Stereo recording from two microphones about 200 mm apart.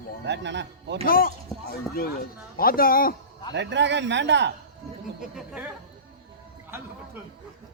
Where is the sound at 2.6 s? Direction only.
45° left (ahead or behind).